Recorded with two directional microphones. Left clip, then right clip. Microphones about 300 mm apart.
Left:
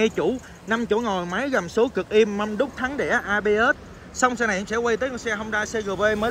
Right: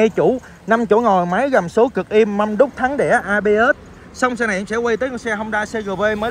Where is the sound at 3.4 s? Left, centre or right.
Centre.